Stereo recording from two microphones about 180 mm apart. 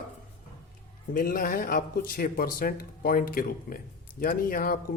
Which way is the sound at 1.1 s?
50° left (ahead or behind).